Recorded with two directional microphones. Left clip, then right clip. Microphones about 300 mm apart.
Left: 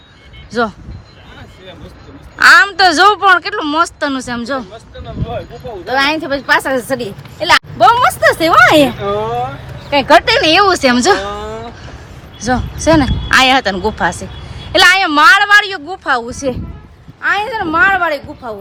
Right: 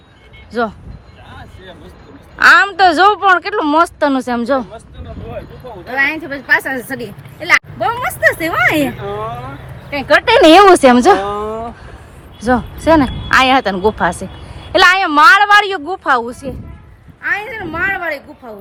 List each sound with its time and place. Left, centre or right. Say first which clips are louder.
0.5 s a woman's voice: left 2 dB; centre
2.3 s a woman's voice: left 2 dB; centre
5.9 s a woman's voice: left 3 dB; centre
9.9 s speech: left 4 dB; left
10.2 s a woman's voice: right 4 dB; centre
12.5 s a woman's voice: right 1 dB; centre